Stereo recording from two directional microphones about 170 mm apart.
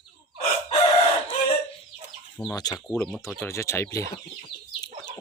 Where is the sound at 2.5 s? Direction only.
20° left (ahead or behind).